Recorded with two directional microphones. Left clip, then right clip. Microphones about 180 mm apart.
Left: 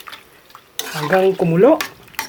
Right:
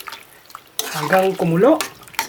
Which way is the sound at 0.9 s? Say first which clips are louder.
Left 1 dB; 10° right (ahead or behind).